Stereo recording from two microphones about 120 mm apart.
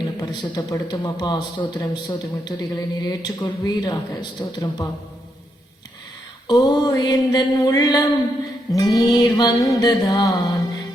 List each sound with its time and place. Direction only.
0.2 s speech: 35° left (ahead or behind)
6.5 s speech: 30° left (ahead or behind)